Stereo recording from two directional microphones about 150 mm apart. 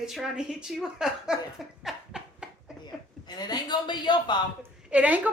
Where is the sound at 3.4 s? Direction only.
30° left (ahead or behind).